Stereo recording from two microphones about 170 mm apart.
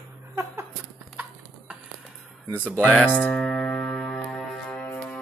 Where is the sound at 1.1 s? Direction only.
10° right (ahead or behind).